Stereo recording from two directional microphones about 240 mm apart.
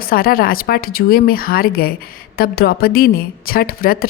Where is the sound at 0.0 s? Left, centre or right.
Left.